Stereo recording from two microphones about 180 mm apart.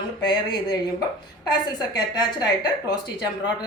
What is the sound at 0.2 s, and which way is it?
Speech, 25° left (ahead or behind).